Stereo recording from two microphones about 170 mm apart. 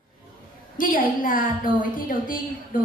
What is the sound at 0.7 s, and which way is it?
A woman's voice, 55° left (ahead or behind).